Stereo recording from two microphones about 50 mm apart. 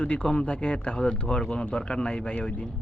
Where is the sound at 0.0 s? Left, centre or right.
Left.